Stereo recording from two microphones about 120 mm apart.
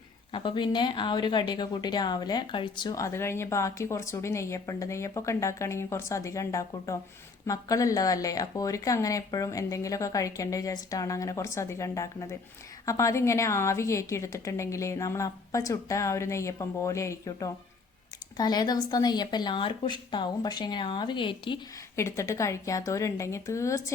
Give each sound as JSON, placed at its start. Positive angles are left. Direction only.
{"t": 0.3, "sound": "a woman's voice", "side_deg": 45}
{"t": 21.9, "sound": "a woman's voice", "side_deg": 25}